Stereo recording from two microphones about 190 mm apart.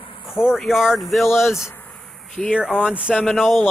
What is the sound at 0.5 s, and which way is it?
Speech, centre (ahead or behind).